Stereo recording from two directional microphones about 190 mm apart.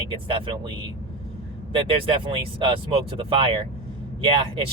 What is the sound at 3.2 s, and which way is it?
Speech, 25° right (ahead or behind).